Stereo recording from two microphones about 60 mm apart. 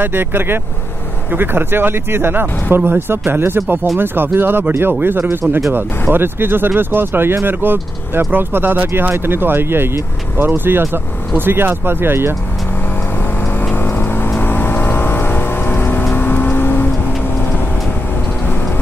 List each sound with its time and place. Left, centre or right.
0.0 s speech: right
14.4 s vehicle: left